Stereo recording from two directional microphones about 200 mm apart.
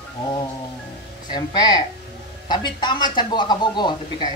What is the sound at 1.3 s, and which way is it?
A man's voice, 20° left (ahead or behind).